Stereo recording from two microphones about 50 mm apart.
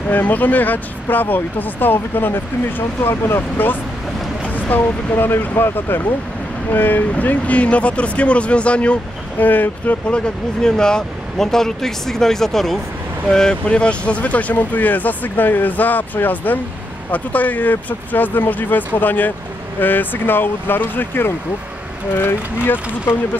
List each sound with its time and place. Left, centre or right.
0.1 s speech: left
4.6 s speech: left
6.7 s speech: left
9.4 s speech: left
10.1 s speech: centre; by 21.3 s left